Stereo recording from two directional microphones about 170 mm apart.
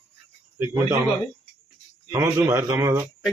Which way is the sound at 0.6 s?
20° right (ahead or behind).